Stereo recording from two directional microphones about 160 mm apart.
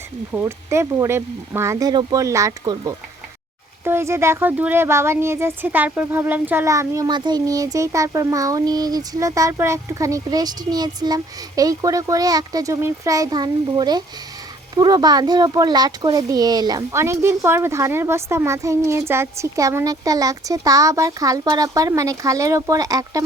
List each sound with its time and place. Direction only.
0.4 s speech: 15° right (ahead or behind)